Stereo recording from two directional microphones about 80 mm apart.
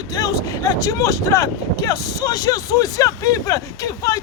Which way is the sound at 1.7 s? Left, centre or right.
Left.